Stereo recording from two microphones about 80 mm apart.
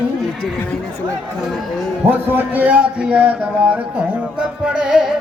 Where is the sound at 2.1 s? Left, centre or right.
Right.